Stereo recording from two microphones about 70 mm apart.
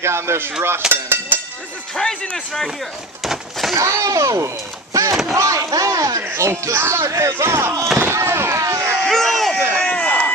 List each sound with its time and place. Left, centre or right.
0.0 s speech: right
2.0 s speech: centre
3.2 s a sound: centre
3.7 s speech: right
9.0 s a sound: centre
9.8 s chop: centre